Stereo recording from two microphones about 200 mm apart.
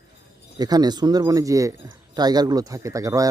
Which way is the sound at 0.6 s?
20° right (ahead or behind).